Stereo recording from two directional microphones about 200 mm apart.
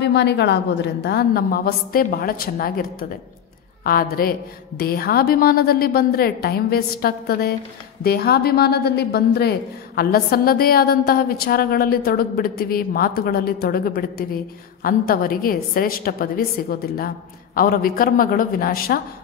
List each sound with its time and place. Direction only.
0.0 s a woman's voice: 60° left (ahead or behind)